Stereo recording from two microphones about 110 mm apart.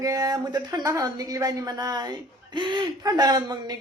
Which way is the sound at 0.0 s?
30° right (ahead or behind).